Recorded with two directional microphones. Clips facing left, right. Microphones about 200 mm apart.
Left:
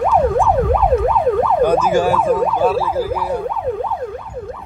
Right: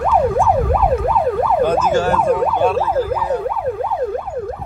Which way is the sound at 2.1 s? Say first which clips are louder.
Even; centre (ahead or behind).